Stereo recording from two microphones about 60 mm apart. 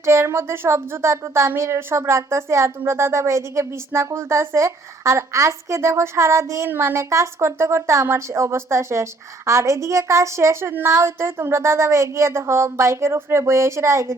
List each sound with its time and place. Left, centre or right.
0.0 s a woman's voice: right
13.4 s speech: right